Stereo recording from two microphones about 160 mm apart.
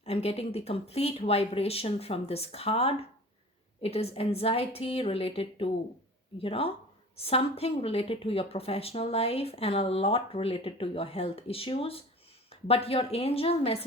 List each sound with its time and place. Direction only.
0.0 s a woman's voice: 40° left (ahead or behind)